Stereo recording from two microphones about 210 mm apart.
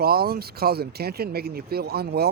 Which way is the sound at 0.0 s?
45° right (ahead or behind).